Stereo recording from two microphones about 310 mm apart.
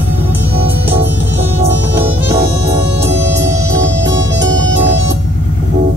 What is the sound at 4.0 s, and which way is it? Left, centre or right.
Music, right.